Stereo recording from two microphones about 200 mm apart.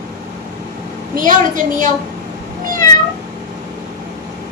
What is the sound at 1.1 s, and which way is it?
Speech, 40° right (ahead or behind).